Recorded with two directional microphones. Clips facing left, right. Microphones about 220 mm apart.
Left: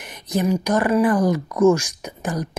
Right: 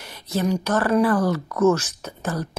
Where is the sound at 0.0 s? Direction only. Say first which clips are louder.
Left 2 dB; 15° left (ahead or behind).